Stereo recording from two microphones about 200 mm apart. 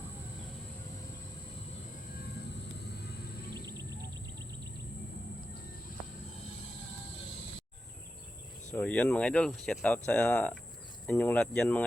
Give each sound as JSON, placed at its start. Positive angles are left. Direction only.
{"t": 3.5, "sound": "music", "side_deg": -20}
{"t": 8.7, "sound": "speech", "side_deg": 5}